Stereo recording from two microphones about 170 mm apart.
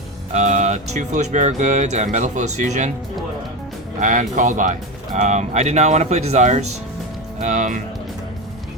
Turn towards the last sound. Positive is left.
turn(degrees=-45)  # may be behind; listen again after turning